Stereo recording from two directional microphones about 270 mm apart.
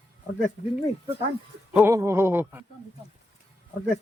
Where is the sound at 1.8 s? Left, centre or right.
Centre.